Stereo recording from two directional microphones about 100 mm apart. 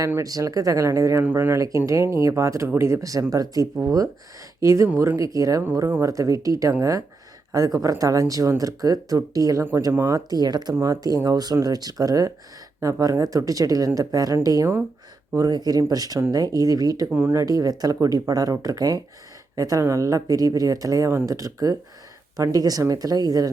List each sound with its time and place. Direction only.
0.2 s speech: 35° right (ahead or behind)
17.2 s speech: 20° right (ahead or behind)
17.4 s speech: 35° right (ahead or behind)